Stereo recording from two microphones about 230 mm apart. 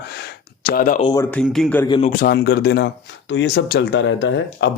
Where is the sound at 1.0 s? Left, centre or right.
Centre.